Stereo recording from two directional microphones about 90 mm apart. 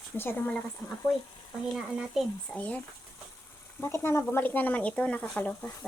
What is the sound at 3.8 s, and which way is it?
Speech, 30° left (ahead or behind).